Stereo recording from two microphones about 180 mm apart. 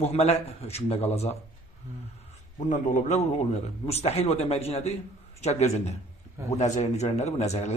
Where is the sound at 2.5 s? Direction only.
45° left (ahead or behind).